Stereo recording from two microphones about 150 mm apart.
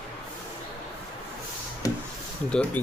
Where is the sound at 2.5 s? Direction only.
10° left (ahead or behind).